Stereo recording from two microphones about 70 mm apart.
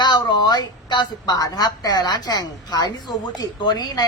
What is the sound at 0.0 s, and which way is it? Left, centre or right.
A woman's voice, left.